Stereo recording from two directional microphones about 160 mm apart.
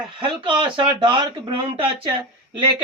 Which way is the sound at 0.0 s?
30° right (ahead or behind).